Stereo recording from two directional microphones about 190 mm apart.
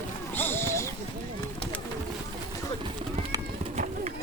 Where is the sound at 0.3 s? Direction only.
10° left (ahead or behind).